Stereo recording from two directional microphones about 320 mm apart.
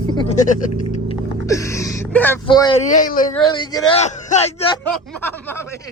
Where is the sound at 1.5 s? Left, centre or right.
Centre.